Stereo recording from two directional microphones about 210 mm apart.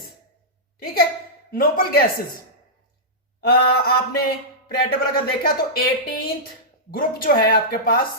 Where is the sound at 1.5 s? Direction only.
45° left (ahead or behind).